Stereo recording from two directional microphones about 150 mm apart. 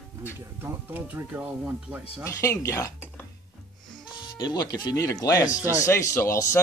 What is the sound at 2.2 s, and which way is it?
Speech, 20° left (ahead or behind).